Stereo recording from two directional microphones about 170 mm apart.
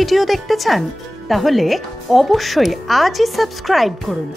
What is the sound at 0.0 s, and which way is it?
Speech, centre (ahead or behind).